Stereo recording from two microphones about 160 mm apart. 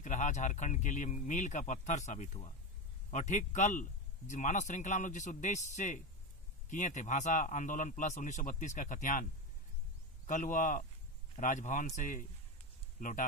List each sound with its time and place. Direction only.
0.0 s speech: 50° left (ahead or behind)
10.2 s speech: 50° left (ahead or behind)